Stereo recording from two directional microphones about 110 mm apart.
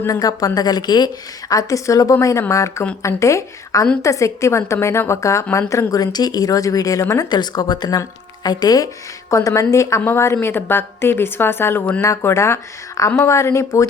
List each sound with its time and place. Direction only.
0.1 s a woman's voice: 35° left (ahead or behind)